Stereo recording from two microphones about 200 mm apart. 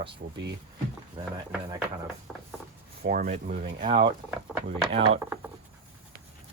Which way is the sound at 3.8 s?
25° right (ahead or behind).